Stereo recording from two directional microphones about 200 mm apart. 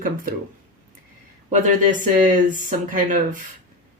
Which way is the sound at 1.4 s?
40° right (ahead or behind).